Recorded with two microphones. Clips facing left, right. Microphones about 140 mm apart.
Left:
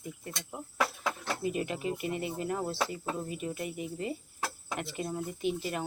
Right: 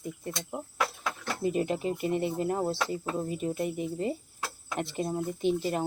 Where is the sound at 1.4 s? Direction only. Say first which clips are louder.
Right 5 dB; 35° right (ahead or behind).